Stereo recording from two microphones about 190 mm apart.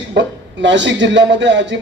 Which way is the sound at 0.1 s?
70° right (ahead or behind).